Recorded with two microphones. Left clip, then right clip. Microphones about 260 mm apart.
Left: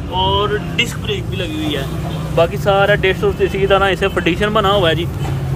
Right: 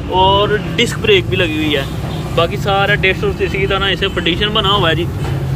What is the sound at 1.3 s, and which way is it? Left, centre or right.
Speech, centre.